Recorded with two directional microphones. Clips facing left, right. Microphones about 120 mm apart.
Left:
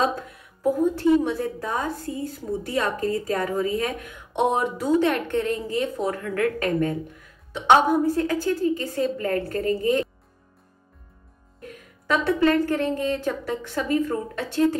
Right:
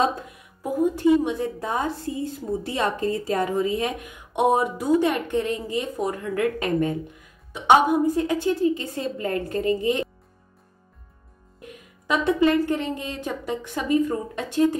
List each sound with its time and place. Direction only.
0.6 s a woman's voice: 15° right (ahead or behind)
4.0 s a woman's voice: 15° right (ahead or behind)
11.7 s a woman's voice: 15° right (ahead or behind)